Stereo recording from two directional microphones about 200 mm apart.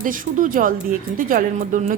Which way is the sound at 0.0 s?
40° right (ahead or behind).